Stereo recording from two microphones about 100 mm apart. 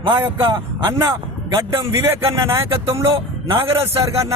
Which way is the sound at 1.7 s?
30° right (ahead or behind).